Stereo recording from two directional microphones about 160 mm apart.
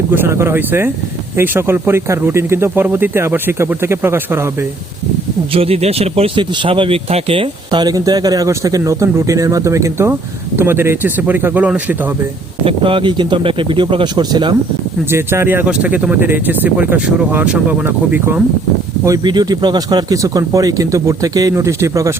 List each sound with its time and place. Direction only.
0.1 s speech: 15° right (ahead or behind)
5.5 s speech: 40° right (ahead or behind); by 11.9 s 10° right (ahead or behind)
12.6 s speech: 35° right (ahead or behind)
15.1 s speech: 15° right (ahead or behind)
19.0 s speech: 25° right (ahead or behind)